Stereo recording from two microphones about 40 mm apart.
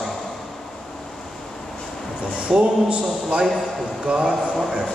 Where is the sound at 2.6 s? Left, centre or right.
Right.